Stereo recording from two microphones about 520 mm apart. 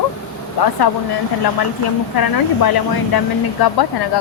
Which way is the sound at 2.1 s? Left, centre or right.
Left.